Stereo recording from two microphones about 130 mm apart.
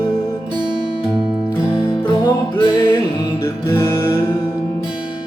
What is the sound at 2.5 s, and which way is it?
Music, 35° left (ahead or behind).